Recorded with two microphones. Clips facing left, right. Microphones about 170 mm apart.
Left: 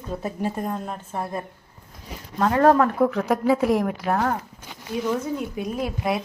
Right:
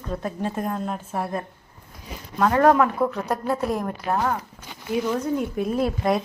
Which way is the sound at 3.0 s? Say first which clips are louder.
Left 4 dB; 80° left.